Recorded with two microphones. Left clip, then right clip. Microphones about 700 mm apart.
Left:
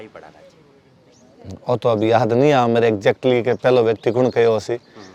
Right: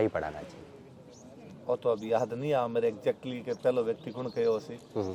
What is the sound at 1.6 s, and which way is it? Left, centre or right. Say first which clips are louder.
Speech: left 12 dB; left.